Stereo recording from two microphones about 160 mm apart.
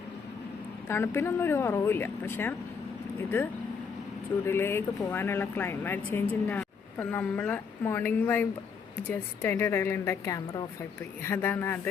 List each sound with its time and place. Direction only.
0.9 s a woman's voice: 15° left (ahead or behind)
4.4 s a woman's voice: 15° left (ahead or behind)